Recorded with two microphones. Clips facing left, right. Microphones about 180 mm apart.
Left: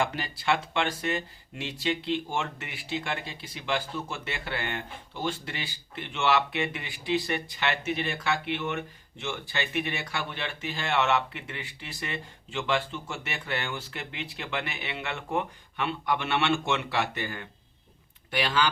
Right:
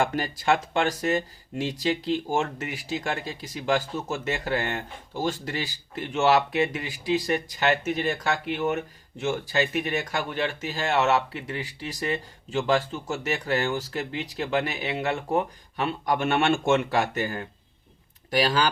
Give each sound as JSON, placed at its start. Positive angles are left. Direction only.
{"t": 0.0, "sound": "speech", "side_deg": -45}